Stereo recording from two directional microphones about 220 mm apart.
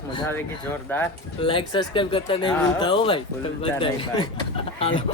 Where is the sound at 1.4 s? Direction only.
20° left (ahead or behind).